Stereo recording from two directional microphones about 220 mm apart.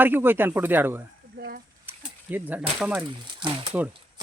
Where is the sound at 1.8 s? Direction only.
10° right (ahead or behind).